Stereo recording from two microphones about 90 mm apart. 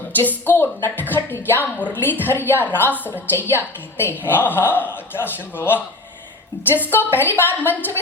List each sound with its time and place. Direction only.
0.2 s a woman's voice: 20° left (ahead or behind)